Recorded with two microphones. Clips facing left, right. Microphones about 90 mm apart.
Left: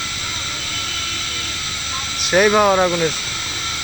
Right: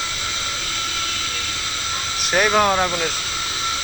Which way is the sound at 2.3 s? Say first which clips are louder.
Left 4 dB; 5° left (ahead or behind).